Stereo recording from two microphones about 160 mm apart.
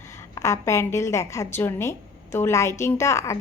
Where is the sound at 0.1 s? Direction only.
20° left (ahead or behind).